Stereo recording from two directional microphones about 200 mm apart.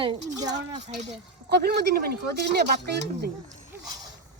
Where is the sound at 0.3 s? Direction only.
20° right (ahead or behind).